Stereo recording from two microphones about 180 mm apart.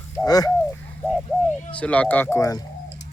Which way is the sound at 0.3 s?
20° left (ahead or behind).